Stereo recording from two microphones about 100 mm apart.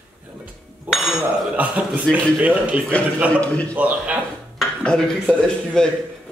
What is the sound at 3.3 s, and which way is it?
Speech, 15° left (ahead or behind).